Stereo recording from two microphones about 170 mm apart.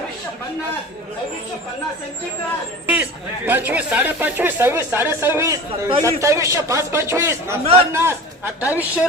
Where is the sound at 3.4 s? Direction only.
10° right (ahead or behind).